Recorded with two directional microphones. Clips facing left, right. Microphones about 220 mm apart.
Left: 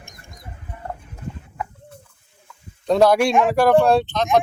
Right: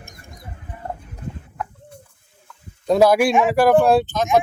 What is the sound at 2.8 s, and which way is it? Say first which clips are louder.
A man's voice: right 1 dB; 5° right (ahead or behind).